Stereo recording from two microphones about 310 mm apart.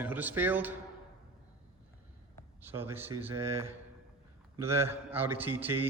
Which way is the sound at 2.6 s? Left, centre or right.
Centre.